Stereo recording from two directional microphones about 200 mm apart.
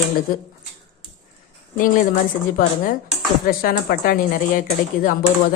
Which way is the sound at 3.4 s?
45° left (ahead or behind).